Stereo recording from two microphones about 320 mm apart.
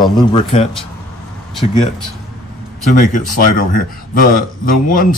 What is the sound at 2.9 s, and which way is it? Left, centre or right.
A man's voice, left.